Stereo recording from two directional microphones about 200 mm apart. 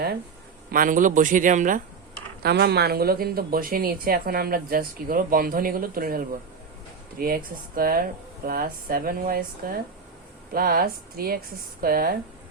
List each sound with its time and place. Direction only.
0.7 s speech: 40° right (ahead or behind)
2.4 s speech: 55° right (ahead or behind)